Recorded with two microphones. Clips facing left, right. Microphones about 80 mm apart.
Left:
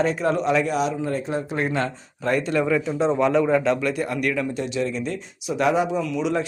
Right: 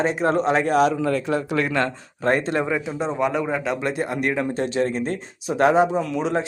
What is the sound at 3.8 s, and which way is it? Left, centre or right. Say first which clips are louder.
Speech: even; right.